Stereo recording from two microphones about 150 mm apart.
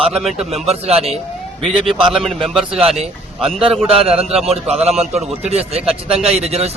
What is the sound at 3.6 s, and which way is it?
Speech, centre (ahead or behind).